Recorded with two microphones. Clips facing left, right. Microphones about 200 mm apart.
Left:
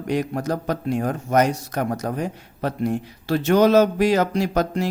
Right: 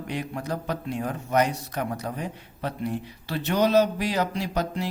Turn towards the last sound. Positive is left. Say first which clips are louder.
# left 6 dB
turn(degrees=45)  # may be behind; listen again after turning